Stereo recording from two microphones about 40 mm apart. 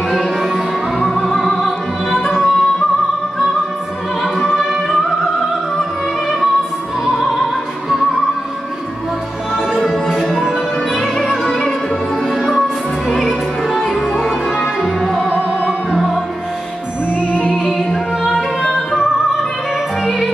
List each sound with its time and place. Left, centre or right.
1.6 s music: centre
4.2 s music: centre
9.8 s music: centre
13.1 s music: centre
17.6 s music: centre